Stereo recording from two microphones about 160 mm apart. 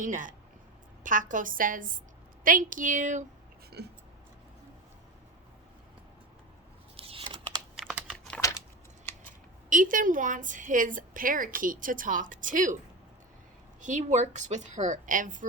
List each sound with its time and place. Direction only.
0.0 s a woman's voice: 55° right (ahead or behind)
3.8 s speech: 90° right
6.9 s scissors: 35° right (ahead or behind)
7.8 s typing: centre (ahead or behind)
9.6 s a woman's voice: 55° right (ahead or behind)
13.8 s a woman's voice: 45° right (ahead or behind)